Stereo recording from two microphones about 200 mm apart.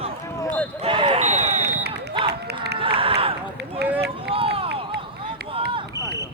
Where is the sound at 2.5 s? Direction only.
55° right (ahead or behind).